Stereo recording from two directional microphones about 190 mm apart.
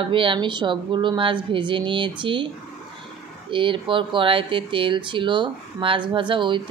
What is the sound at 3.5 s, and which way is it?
Speech, 25° right (ahead or behind).